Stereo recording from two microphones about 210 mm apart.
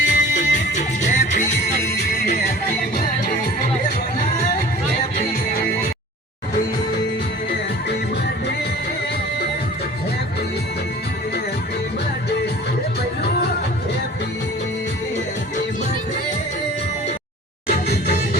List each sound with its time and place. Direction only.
0.0 s music: 35° left (ahead or behind)